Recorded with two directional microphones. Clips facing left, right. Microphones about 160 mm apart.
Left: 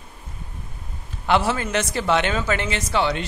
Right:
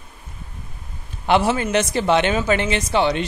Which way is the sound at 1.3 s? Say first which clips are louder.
Right 3 dB; 20° right (ahead or behind).